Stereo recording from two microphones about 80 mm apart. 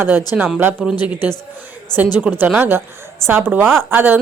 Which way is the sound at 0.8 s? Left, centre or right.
Centre.